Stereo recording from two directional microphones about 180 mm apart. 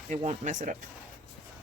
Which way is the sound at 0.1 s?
40° right (ahead or behind).